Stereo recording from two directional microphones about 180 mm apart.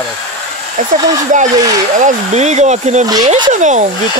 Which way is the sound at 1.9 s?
40° right (ahead or behind).